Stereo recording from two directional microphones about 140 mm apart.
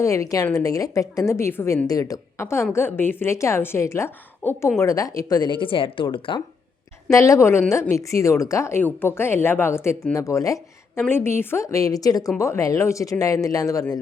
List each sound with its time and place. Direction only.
0.0 s speech: 25° left (ahead or behind)
7.1 s a woman's voice: 20° left (ahead or behind)